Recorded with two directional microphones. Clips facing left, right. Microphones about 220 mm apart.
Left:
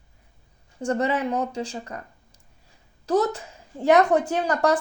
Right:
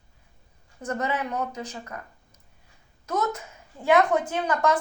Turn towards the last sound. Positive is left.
turn(degrees=40)  # may be behind; listen again after turning